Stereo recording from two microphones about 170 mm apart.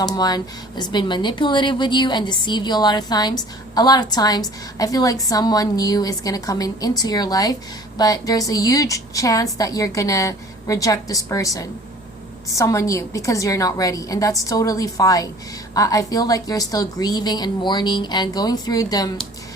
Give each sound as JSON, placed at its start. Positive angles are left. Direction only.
{"t": 0.0, "sound": "speech", "side_deg": 25}